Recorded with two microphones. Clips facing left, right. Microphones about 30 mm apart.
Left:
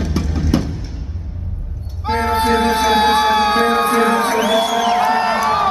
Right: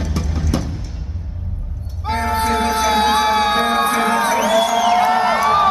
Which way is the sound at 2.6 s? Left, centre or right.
Left.